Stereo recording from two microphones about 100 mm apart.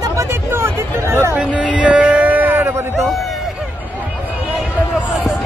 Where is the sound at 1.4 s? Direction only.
15° right (ahead or behind).